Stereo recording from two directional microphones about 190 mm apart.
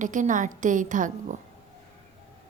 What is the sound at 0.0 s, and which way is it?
A woman's voice, 40° right (ahead or behind).